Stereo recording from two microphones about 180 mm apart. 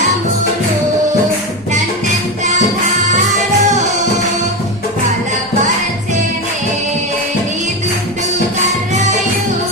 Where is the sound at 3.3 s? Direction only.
40° right (ahead or behind).